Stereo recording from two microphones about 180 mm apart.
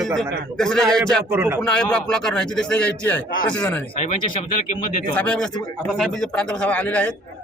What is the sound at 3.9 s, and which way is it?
Speech, 35° left (ahead or behind).